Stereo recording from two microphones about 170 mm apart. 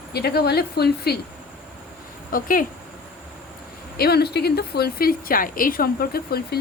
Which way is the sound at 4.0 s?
70° left (ahead or behind).